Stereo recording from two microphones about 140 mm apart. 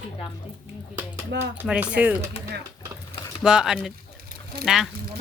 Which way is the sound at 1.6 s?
10° right (ahead or behind).